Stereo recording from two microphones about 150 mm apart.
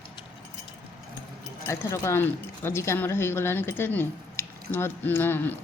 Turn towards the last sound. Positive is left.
turn(degrees=15)  # may be behind; listen again after turning